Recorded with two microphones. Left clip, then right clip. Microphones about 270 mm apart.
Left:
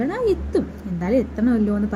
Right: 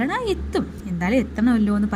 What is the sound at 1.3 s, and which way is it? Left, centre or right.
Speech, right.